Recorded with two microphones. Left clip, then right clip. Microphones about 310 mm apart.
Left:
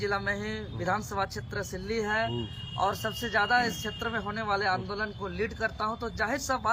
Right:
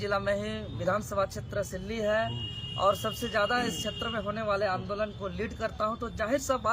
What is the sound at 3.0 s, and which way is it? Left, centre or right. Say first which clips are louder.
Speech: left 1 dB; centre.